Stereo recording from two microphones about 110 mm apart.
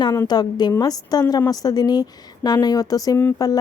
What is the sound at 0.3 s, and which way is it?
A woman's voice, 40° left (ahead or behind).